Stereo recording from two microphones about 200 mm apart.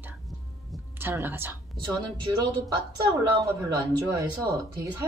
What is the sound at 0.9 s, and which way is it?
Speech, 10° right (ahead or behind).